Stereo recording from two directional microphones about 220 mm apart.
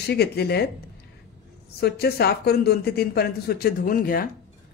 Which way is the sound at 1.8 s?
45° left (ahead or behind).